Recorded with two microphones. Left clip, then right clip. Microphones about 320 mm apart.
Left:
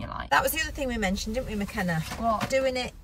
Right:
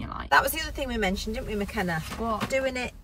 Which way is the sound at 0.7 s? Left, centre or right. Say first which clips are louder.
Right 1 dB; centre.